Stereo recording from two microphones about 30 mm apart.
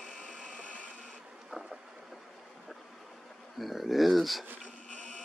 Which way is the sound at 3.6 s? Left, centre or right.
Centre.